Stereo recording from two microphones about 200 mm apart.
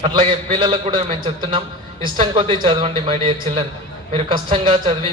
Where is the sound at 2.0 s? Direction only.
25° right (ahead or behind).